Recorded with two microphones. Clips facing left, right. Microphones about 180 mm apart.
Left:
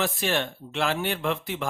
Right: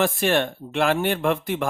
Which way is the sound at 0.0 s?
55° right (ahead or behind).